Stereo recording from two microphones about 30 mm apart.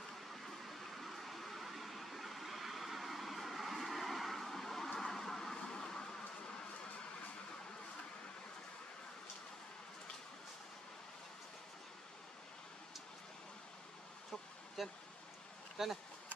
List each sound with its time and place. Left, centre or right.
0.3 s vehicle: centre
14.8 s speech: centre